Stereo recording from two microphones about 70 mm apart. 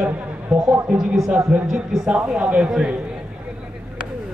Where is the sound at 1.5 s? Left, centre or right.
Centre.